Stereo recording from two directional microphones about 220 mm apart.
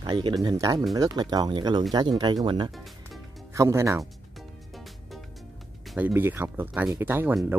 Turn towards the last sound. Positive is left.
turn(degrees=-10)  # may be behind; listen again after turning